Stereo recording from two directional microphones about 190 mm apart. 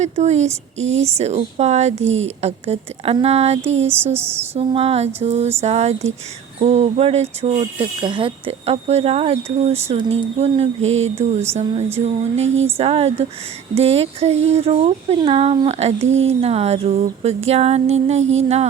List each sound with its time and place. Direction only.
0.0 s speech: 35° right (ahead or behind)
3.8 s speech: 10° right (ahead or behind)
4.5 s speech: 30° right (ahead or behind)